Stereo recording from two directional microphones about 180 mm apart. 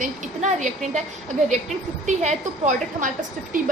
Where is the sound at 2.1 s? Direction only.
45° right (ahead or behind).